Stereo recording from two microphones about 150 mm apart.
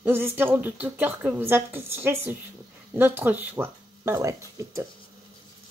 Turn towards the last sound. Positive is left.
turn(degrees=-20)  # may be behind; listen again after turning